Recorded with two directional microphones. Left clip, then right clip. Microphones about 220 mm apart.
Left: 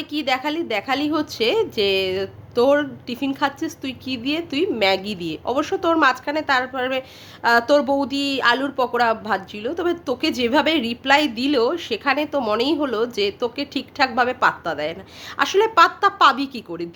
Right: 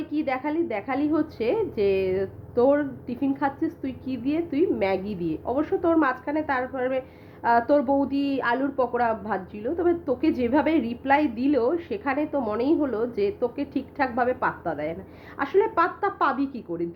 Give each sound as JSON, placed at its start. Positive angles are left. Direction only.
{"t": 0.0, "sound": "a woman's voice", "side_deg": 15}